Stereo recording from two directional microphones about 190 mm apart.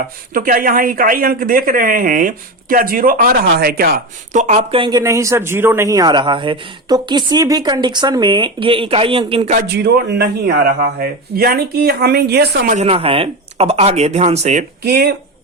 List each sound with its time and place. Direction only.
0.3 s speech: 45° right (ahead or behind); by 9.6 s 30° right (ahead or behind)
9.6 s speech: 55° right (ahead or behind)
12.7 s speech: 35° right (ahead or behind)
14.8 s speech: 60° right (ahead or behind)